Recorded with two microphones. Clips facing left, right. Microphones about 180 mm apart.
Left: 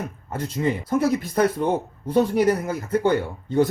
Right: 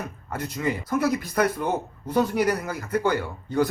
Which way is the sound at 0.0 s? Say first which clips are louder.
Left 2 dB; 25° left (ahead or behind).